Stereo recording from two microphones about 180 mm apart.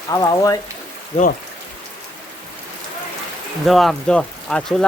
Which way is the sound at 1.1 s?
40° left (ahead or behind).